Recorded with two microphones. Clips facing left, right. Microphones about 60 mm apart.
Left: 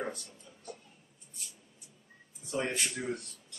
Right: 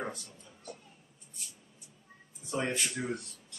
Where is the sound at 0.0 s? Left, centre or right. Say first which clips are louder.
Left 1 dB; centre.